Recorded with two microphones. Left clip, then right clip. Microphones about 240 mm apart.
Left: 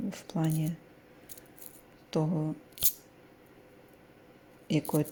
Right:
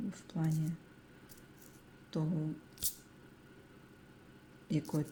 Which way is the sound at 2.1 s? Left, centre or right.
Left.